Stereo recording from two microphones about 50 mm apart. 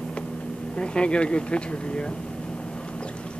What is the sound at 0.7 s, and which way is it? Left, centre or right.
Speech, centre.